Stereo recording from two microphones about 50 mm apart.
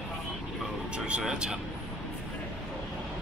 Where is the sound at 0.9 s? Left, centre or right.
Right.